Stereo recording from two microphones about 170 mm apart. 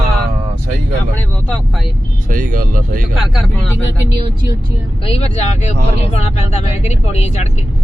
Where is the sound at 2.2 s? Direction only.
55° right (ahead or behind).